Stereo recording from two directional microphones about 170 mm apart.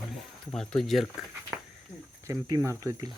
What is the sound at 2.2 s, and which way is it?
Speech, 20° right (ahead or behind).